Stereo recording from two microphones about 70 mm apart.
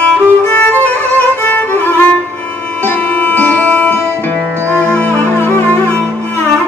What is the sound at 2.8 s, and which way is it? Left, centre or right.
Music, left.